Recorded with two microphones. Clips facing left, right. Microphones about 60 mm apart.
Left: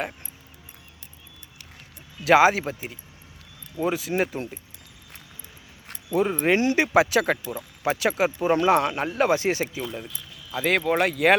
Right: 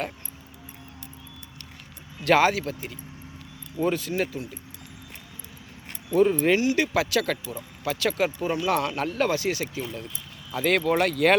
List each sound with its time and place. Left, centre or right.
2.2 s speech: centre
2.5 s speech: left
3.8 s speech: centre
4.4 s speech: left
6.1 s speech: centre
6.5 s speech: left
6.7 s speech: left
9.4 s speech: left
10.5 s speech: centre